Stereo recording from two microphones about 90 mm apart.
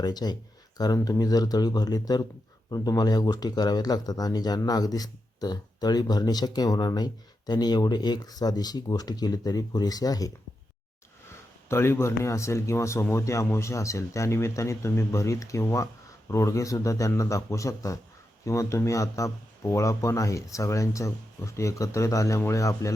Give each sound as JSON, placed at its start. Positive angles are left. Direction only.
{"t": 0.0, "sound": "speech", "side_deg": 50}
{"t": 11.7, "sound": "speech", "side_deg": 30}